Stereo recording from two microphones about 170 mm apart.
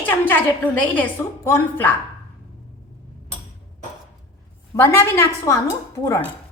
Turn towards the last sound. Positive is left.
turn(degrees=15)  # may be behind; listen again after turning